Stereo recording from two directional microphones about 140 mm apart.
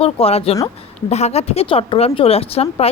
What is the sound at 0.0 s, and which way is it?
A woman's voice, 45° left (ahead or behind).